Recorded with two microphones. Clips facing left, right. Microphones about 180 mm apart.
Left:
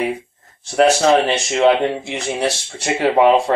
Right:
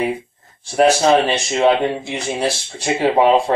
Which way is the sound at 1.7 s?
65° left (ahead or behind).